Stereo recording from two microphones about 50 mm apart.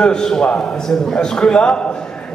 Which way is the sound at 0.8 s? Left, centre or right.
Centre.